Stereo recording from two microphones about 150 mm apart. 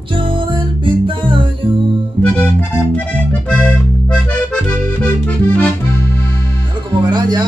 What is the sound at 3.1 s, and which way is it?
Accordion, 10° left (ahead or behind).